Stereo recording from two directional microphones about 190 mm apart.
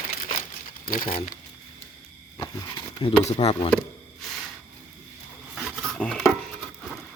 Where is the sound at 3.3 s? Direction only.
35° left (ahead or behind).